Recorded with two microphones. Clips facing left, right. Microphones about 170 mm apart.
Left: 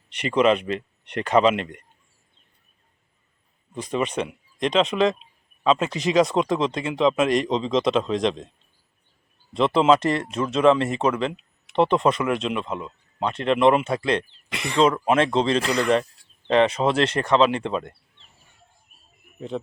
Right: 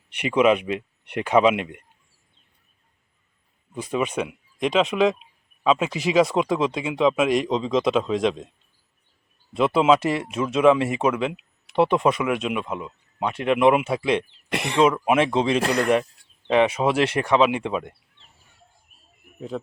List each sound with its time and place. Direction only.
0.1 s speech: 10° right (ahead or behind)
3.8 s speech: 5° right (ahead or behind)
9.6 s speech: 5° right (ahead or behind)
14.5 s speech: 60° right (ahead or behind)
15.0 s speech: 10° right (ahead or behind)
15.6 s speech: 55° right (ahead or behind)
16.5 s speech: 10° right (ahead or behind)